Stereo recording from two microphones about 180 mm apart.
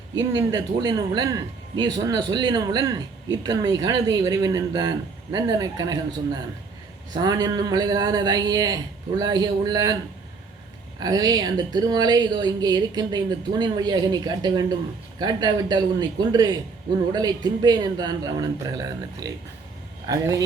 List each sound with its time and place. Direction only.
0.3 s a man's voice: 20° right (ahead or behind)
11.0 s a man's voice: 20° right (ahead or behind)